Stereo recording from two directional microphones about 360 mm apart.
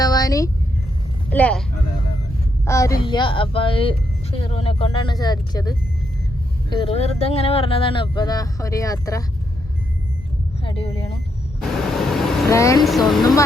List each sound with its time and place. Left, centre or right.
0.0 s vehicle: centre
1.3 s speech: centre
2.6 s speech: centre
10.6 s speech: centre
11.9 s vehicle: centre